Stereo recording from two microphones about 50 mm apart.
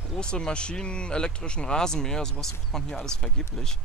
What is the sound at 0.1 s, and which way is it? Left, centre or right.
Speech, centre.